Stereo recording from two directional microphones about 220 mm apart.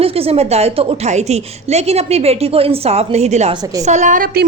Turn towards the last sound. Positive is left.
turn(degrees=-45)  # may be behind; listen again after turning